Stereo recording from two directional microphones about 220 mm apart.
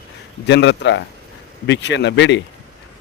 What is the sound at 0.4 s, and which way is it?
Speech, 55° left (ahead or behind).